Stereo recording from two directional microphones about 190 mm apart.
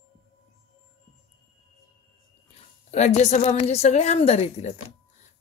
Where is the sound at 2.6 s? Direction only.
35° left (ahead or behind).